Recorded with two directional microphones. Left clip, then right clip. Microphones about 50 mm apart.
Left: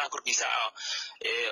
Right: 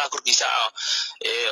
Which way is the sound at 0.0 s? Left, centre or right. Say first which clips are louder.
Right 8 dB; centre.